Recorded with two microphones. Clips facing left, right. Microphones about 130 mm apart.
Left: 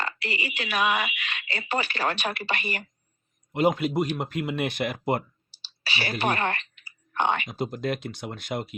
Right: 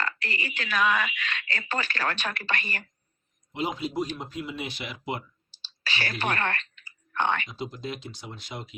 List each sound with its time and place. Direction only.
0.2 s speech: 15° left (ahead or behind)
3.5 s speech: 55° left (ahead or behind)
5.6 s clicking: 15° left (ahead or behind)
7.5 s speech: 55° left (ahead or behind)